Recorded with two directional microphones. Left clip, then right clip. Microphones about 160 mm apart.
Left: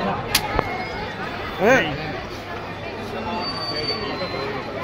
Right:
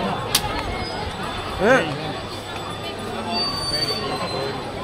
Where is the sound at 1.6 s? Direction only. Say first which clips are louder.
Even; 5° left (ahead or behind).